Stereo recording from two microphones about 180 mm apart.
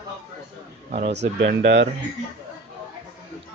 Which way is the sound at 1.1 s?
70° right (ahead or behind).